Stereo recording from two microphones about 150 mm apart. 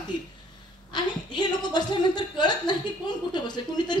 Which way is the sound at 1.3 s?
30° left (ahead or behind).